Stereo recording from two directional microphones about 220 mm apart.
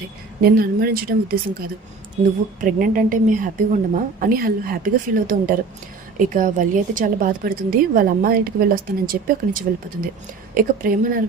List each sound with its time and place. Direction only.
0.4 s a woman's voice: 40° right (ahead or behind)